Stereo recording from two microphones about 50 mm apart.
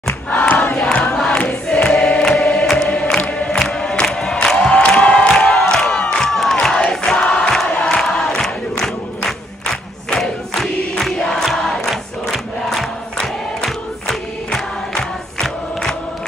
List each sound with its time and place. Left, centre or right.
0.9 s a sound: centre
1.4 s choir: left
3.2 s music: left
3.4 s crowd: centre
7.1 s choir: centre
7.7 s a sound: left
8.0 s crowd: centre
13.7 s choir: centre